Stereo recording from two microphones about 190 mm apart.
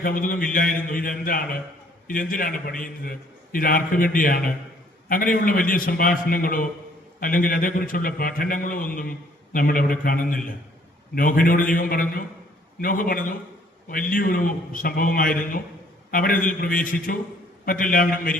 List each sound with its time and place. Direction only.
0.0 s a man's voice: 45° left (ahead or behind)